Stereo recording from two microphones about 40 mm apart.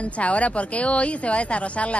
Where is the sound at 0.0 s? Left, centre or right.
Left.